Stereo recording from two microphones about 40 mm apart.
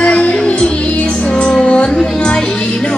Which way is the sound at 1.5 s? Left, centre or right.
Centre.